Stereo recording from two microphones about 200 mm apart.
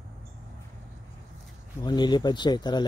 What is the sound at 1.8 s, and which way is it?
Speech, 20° left (ahead or behind).